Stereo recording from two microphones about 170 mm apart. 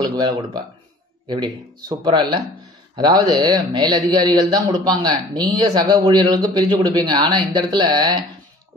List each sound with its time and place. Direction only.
0.0 s a man's voice: 20° right (ahead or behind)